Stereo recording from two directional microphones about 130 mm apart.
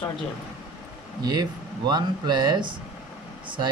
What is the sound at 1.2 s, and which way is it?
Speech, 30° right (ahead or behind).